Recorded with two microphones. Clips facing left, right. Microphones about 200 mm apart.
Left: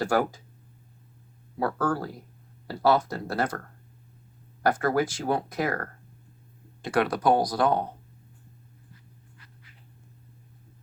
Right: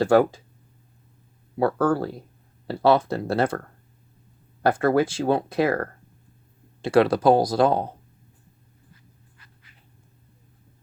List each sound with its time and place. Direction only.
0.0 s speech: 25° right (ahead or behind)
1.5 s speech: 25° right (ahead or behind)
4.6 s speech: 30° right (ahead or behind)
6.8 s speech: 30° right (ahead or behind)